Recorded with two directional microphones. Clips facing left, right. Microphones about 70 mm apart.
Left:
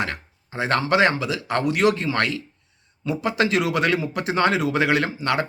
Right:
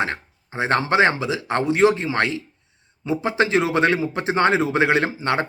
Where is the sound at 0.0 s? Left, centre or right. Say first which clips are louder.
Right 3 dB; right.